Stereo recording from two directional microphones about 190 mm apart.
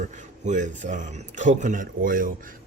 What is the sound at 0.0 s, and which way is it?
A man's voice, 40° right (ahead or behind).